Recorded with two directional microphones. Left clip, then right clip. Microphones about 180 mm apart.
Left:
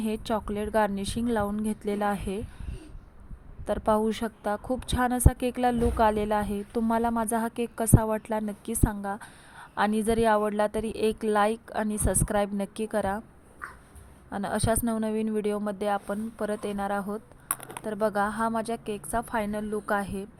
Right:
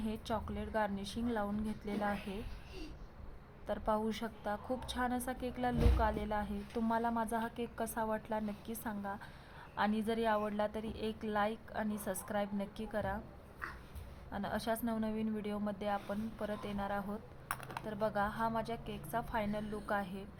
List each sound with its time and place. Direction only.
0.0 s a woman's voice: 35° left (ahead or behind)
3.7 s a woman's voice: 35° left (ahead or behind)
14.3 s a woman's voice: 35° left (ahead or behind)
17.6 s a sound: 20° left (ahead or behind)
17.8 s a woman's voice: 30° left (ahead or behind)